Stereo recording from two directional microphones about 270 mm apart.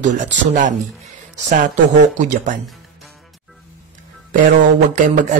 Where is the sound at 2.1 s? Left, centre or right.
Right.